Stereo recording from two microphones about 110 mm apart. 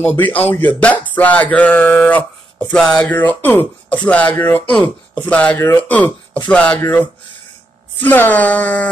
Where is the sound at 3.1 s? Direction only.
15° left (ahead or behind).